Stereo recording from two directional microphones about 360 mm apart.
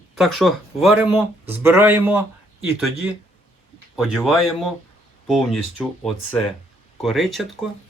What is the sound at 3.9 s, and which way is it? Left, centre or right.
Speech, centre.